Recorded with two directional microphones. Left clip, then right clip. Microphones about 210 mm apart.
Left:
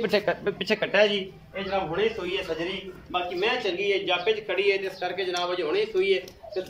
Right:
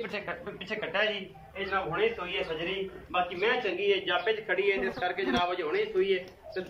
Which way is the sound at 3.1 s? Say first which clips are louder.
Left 2 dB; 20° left (ahead or behind).